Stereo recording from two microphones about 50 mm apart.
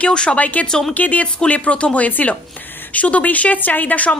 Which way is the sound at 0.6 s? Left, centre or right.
Centre.